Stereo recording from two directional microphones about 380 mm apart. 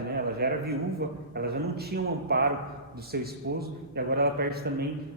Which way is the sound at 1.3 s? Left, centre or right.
Right.